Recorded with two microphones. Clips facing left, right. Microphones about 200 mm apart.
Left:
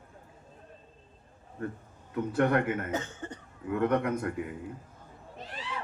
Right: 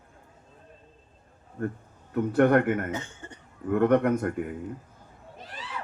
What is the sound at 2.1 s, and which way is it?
Speech, 55° right (ahead or behind).